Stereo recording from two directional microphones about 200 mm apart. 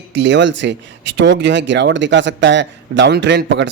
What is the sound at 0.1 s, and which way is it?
Speech, 65° right (ahead or behind).